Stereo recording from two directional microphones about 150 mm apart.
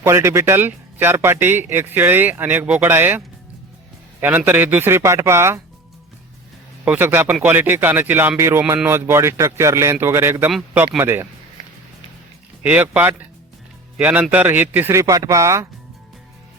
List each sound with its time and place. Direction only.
0.0 s speech: 15° right (ahead or behind)
6.8 s speech: 10° right (ahead or behind)
12.6 s speech: 10° right (ahead or behind)